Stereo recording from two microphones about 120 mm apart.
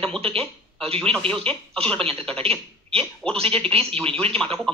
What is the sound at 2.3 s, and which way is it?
Speech, 55° right (ahead or behind).